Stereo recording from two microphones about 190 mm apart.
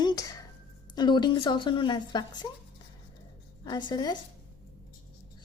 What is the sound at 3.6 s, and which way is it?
Speech, 25° left (ahead or behind).